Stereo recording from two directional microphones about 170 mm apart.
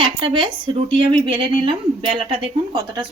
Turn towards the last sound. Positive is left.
turn(degrees=-25)  # may be behind; listen again after turning